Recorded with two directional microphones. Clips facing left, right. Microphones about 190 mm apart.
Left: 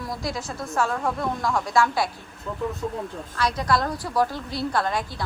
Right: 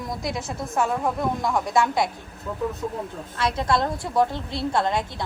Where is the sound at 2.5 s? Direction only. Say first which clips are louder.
Right 1 dB; 5° right (ahead or behind).